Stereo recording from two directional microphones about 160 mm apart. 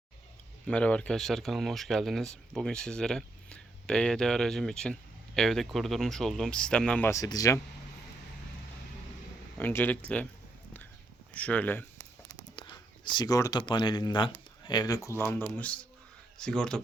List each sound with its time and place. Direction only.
0.7 s speech: 5° left (ahead or behind)
7.1 s speech: 20° left (ahead or behind)
9.6 s speech: 10° left (ahead or behind)
11.3 s speech: 10° left (ahead or behind)
12.5 s speech: 30° left (ahead or behind); by 16.8 s 5° left (ahead or behind)